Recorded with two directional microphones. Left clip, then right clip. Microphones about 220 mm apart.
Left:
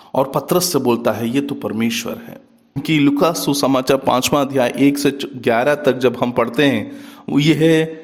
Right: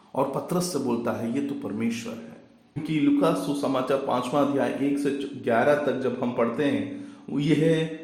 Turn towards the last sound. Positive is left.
turn(degrees=50)  # may be behind; listen again after turning